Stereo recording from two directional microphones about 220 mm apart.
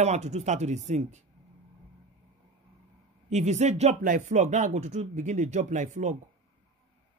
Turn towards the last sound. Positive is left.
turn(degrees=-35)  # may be behind; listen again after turning